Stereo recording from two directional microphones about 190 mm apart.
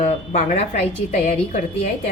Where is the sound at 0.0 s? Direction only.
35° left (ahead or behind).